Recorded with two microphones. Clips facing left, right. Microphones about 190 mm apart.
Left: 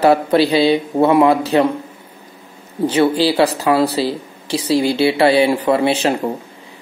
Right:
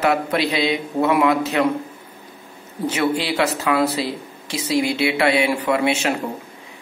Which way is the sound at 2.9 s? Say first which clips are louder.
Left 6 dB; 30° left (ahead or behind).